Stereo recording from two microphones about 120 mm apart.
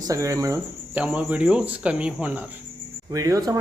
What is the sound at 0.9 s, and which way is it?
Speech, 10° right (ahead or behind).